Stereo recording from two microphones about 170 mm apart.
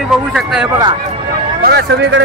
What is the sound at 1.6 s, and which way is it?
Speech, 75° right (ahead or behind).